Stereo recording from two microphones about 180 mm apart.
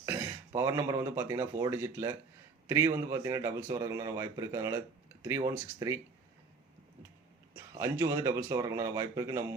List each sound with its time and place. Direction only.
0.0 s a man's voice: 15° right (ahead or behind)
7.5 s a man's voice: 15° right (ahead or behind)